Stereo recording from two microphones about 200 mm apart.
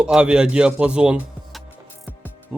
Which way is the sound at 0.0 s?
5° right (ahead or behind).